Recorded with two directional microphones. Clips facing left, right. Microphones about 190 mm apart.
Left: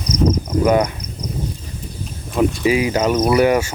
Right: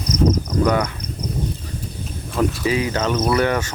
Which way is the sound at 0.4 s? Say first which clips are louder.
Left 3 dB; 25° left (ahead or behind).